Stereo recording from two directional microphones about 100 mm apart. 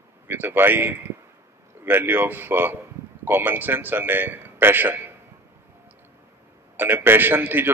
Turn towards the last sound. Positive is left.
turn(degrees=-20)  # may be behind; listen again after turning